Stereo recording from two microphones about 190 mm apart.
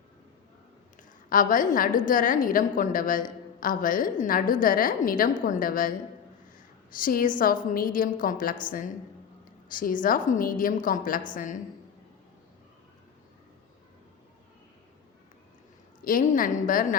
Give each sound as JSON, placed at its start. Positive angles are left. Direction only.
{"t": 1.3, "sound": "a woman's voice", "side_deg": 45}
{"t": 7.0, "sound": "a woman's voice", "side_deg": 50}
{"t": 9.6, "sound": "a woman's voice", "side_deg": 45}
{"t": 16.0, "sound": "a woman's voice", "side_deg": 45}